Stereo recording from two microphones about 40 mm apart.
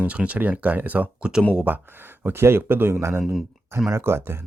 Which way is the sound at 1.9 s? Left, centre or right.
Right.